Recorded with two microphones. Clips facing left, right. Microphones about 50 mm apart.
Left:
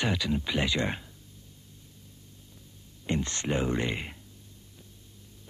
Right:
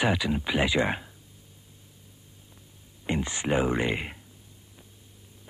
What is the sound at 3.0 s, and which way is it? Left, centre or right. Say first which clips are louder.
Speech: right 2 dB; centre.